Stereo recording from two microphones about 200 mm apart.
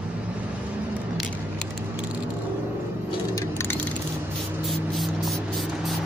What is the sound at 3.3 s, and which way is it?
Vehicle, 15° left (ahead or behind).